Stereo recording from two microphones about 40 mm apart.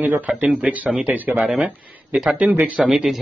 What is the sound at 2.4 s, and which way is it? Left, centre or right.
Speech, right.